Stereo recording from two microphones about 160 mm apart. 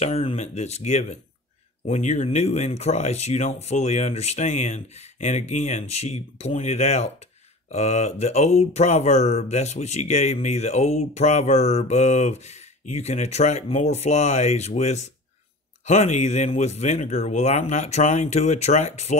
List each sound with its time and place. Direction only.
0.0 s speech: 40° left (ahead or behind)